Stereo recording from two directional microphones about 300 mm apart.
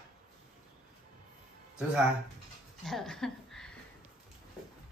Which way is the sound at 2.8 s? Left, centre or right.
Centre.